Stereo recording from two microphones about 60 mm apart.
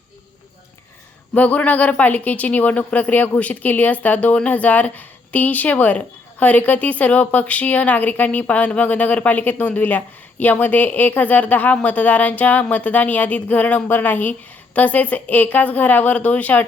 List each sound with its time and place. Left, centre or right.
1.3 s speech: left